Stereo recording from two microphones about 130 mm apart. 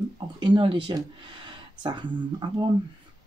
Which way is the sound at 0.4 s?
40° right (ahead or behind).